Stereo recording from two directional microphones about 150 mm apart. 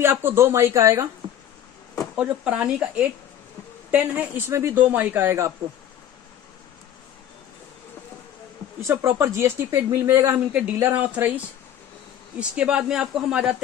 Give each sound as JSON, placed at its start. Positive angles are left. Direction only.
{"t": 0.0, "sound": "speech", "side_deg": -15}
{"t": 2.1, "sound": "speech", "side_deg": -5}
{"t": 8.8, "sound": "a woman's voice", "side_deg": -20}